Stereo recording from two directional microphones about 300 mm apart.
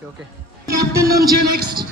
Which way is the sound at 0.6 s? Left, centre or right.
Centre.